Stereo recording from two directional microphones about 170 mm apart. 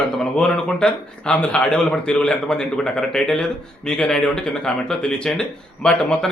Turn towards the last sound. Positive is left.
turn(degrees=5)  # may be behind; listen again after turning